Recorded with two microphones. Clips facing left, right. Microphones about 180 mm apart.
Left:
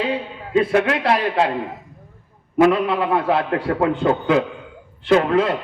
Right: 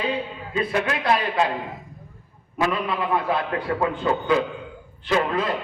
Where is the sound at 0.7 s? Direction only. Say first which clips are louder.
Left 5 dB; 65° left (ahead or behind).